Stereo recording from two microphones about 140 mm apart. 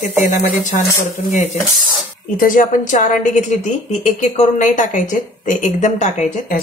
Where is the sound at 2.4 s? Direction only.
70° left (ahead or behind).